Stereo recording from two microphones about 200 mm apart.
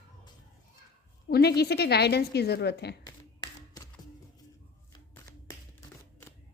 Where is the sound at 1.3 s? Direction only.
55° left (ahead or behind).